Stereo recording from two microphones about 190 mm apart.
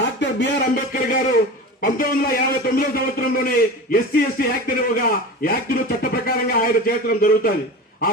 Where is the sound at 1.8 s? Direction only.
50° left (ahead or behind).